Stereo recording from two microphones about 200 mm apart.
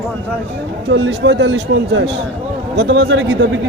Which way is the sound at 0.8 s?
65° right (ahead or behind).